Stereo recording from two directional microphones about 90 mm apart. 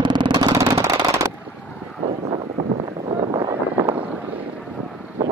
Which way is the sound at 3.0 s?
90° right.